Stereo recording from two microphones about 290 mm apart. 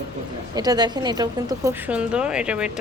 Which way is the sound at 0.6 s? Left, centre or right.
Centre.